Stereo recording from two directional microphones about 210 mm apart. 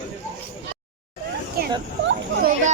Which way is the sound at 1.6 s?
45° right (ahead or behind).